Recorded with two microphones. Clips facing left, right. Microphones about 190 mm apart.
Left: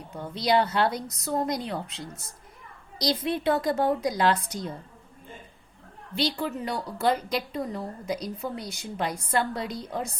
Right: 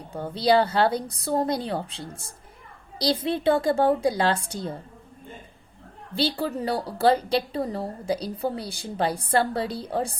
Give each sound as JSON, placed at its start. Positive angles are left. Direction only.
{"t": 0.3, "sound": "a woman's voice", "side_deg": -30}
{"t": 6.1, "sound": "a woman's voice", "side_deg": -30}